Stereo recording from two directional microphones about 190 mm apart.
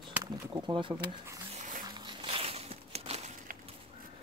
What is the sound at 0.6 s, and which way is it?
Speech, 25° right (ahead or behind).